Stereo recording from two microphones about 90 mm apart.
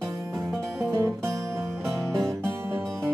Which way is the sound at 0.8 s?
30° right (ahead or behind).